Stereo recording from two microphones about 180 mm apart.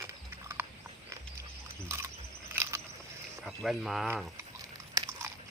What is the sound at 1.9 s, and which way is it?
Wild animals, 15° right (ahead or behind).